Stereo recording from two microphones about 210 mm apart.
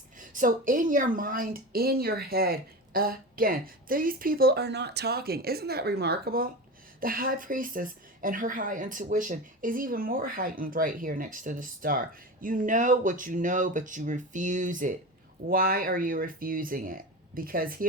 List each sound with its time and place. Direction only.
0.2 s a woman's voice: 40° right (ahead or behind)